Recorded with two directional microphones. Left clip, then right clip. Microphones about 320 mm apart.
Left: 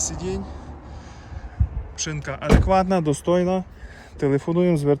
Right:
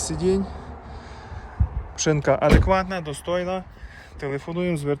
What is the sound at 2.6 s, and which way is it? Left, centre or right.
Speech, centre.